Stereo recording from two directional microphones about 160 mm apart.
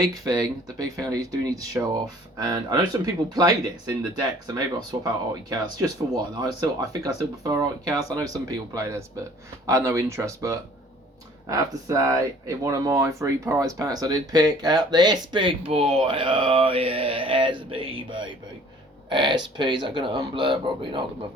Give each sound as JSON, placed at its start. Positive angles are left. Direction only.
{"t": 0.0, "sound": "speech", "side_deg": -25}
{"t": 17.7, "sound": "music", "side_deg": -35}
{"t": 19.0, "sound": "speech", "side_deg": -30}